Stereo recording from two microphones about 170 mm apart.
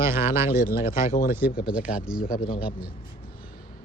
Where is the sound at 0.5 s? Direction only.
55° left (ahead or behind).